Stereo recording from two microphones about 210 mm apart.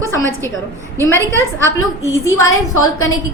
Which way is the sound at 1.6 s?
15° left (ahead or behind).